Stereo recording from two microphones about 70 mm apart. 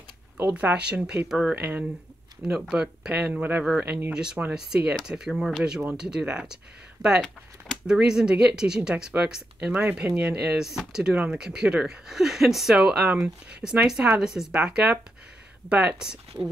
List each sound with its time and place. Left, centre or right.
0.5 s speech: centre
4.1 s speech: centre